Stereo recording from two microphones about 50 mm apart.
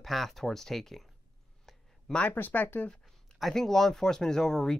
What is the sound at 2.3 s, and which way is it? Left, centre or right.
Speech, left.